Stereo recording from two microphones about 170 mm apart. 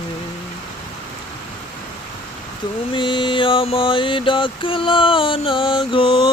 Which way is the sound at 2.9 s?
30° left (ahead or behind).